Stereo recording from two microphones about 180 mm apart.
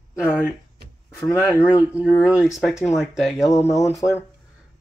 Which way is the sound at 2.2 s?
5° right (ahead or behind).